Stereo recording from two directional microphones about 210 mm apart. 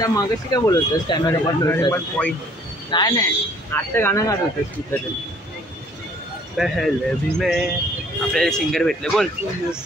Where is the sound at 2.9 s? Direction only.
20° left (ahead or behind).